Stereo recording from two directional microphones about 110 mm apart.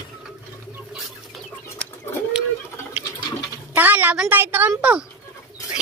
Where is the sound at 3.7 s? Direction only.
15° right (ahead or behind).